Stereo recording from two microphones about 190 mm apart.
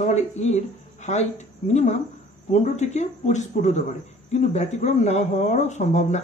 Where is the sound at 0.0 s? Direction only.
35° left (ahead or behind).